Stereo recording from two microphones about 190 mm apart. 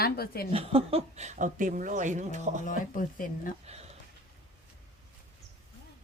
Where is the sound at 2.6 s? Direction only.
45° left (ahead or behind).